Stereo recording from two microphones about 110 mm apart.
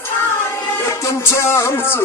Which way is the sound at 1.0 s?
25° left (ahead or behind).